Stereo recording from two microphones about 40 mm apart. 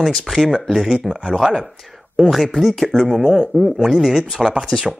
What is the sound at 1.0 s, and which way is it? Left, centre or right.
Speech, centre.